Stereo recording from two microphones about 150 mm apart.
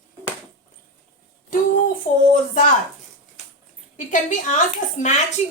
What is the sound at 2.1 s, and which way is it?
Speech, 55° left (ahead or behind).